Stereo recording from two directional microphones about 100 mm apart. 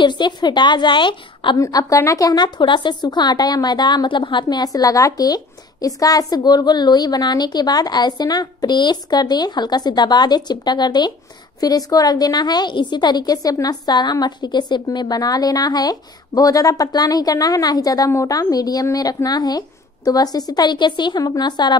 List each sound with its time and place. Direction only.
0.0 s speech: 50° left (ahead or behind)
1.6 s speech: 35° left (ahead or behind)
4.7 s a woman's voice: 35° left (ahead or behind)